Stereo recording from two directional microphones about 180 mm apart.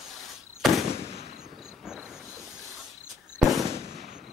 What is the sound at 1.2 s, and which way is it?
Fireworks, 55° left (ahead or behind).